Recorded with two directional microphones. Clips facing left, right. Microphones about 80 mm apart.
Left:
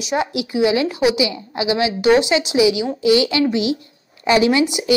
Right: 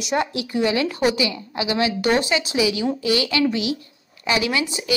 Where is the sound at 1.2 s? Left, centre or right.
Left.